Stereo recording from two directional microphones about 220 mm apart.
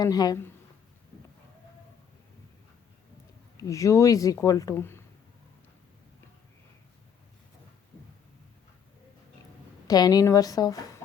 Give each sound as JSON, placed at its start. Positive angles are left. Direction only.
{"t": 0.0, "sound": "a woman's voice", "side_deg": 15}
{"t": 3.6, "sound": "a woman's voice", "side_deg": 15}
{"t": 9.8, "sound": "a woman's voice", "side_deg": 15}